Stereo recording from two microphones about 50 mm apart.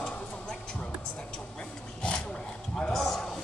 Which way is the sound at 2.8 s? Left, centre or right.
Centre.